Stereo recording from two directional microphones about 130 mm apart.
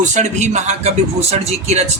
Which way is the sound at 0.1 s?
65° right (ahead or behind).